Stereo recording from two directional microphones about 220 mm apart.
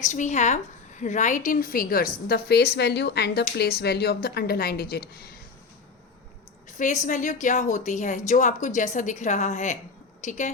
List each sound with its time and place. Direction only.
0.0 s a woman's voice: 35° left (ahead or behind)
6.7 s a woman's voice: 35° left (ahead or behind)